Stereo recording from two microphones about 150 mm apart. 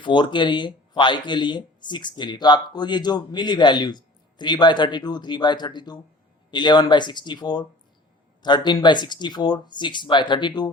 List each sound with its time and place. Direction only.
0.0 s speech: 30° left (ahead or behind)